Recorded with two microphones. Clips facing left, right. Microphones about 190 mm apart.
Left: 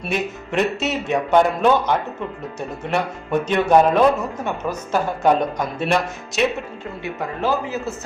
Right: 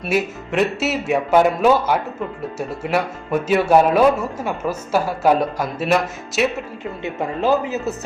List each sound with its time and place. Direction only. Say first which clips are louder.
0.0 s speech: right 3 dB; 5° right (ahead or behind)
7.0 s speech: right 3 dB; 20° right (ahead or behind)